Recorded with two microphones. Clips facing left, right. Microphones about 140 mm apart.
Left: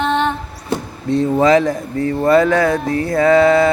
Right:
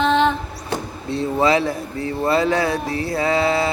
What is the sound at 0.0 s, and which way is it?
Female singing, 90° right.